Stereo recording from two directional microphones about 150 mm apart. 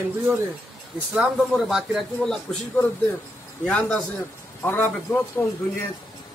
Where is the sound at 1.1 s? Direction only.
5° right (ahead or behind); by 5.5 s 15° left (ahead or behind).